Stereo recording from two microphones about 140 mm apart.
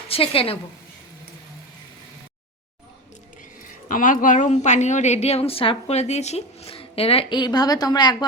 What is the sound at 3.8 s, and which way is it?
A woman's voice, 70° left (ahead or behind).